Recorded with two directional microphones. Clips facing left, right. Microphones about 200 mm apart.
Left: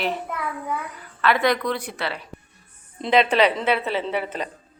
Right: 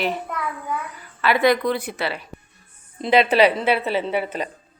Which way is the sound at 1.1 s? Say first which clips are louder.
Right 3 dB; 5° right (ahead or behind).